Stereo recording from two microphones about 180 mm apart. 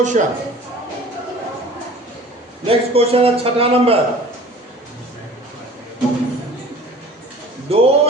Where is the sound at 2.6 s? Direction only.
30° right (ahead or behind).